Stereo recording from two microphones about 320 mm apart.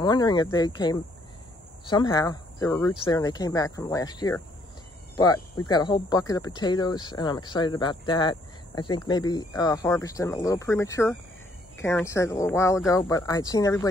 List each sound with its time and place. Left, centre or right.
0.0 s speech: centre
5.2 s speech: left
5.7 s speech: centre